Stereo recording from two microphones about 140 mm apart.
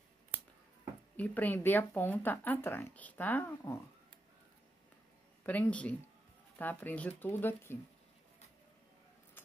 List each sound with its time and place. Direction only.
1.1 s speech: 10° left (ahead or behind)
5.4 s speech: 10° left (ahead or behind)